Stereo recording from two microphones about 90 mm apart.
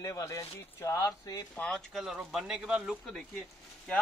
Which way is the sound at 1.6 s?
5° left (ahead or behind).